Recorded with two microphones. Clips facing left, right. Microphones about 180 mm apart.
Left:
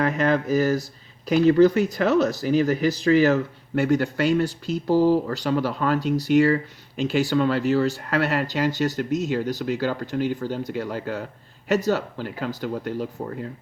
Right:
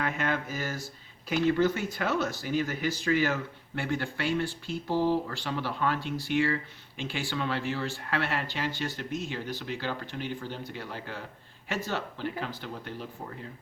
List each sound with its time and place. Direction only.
0.0 s speech: 40° left (ahead or behind)